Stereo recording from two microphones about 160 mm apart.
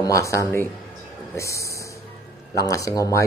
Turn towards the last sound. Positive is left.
turn(degrees=20)  # may be behind; listen again after turning